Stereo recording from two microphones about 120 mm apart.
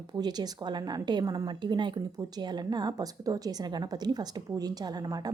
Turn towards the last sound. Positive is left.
turn(degrees=-35)  # may be behind; listen again after turning